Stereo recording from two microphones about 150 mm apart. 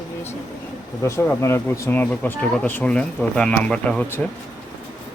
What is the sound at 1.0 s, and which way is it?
Speech, 20° left (ahead or behind).